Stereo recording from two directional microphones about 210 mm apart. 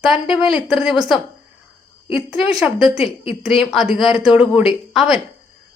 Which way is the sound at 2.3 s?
Centre (ahead or behind).